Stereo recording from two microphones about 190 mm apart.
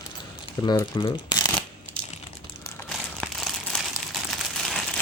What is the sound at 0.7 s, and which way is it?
Speech, 20° left (ahead or behind).